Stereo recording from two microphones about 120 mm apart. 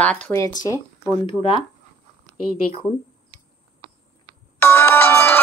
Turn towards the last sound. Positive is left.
turn(degrees=20)  # may be behind; listen again after turning